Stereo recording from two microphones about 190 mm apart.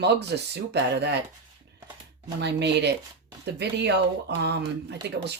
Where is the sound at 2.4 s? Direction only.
65° right (ahead or behind).